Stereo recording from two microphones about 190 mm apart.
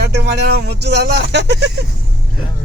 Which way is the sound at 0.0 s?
60° right (ahead or behind).